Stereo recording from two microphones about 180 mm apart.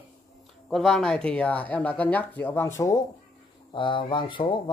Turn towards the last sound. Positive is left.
turn(degrees=25)  # may be behind; listen again after turning